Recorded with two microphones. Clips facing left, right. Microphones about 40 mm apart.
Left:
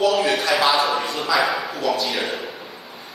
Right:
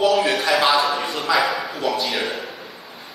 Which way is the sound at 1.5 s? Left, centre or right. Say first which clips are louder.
Even; centre.